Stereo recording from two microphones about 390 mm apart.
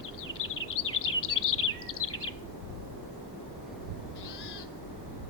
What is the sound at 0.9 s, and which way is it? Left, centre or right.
Bird vocalization, left.